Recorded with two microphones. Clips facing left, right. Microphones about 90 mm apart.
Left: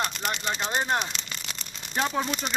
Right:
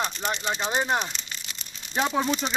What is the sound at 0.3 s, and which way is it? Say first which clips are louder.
Speech: right 2 dB; 15° right (ahead or behind).